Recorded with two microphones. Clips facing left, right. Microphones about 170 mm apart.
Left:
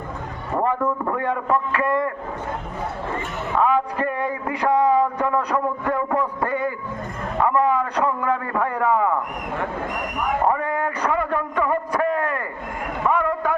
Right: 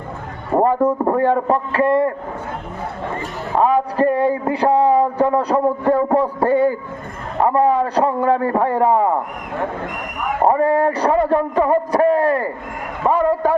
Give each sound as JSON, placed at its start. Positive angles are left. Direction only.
{"t": 0.5, "sound": "a man's voice", "side_deg": -35}
{"t": 3.5, "sound": "a man's voice", "side_deg": -35}
{"t": 10.4, "sound": "a man's voice", "side_deg": -35}